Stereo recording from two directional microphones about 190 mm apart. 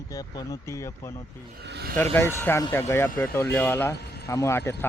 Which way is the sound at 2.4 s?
10° left (ahead or behind).